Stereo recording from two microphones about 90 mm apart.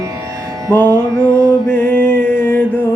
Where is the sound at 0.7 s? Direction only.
20° left (ahead or behind).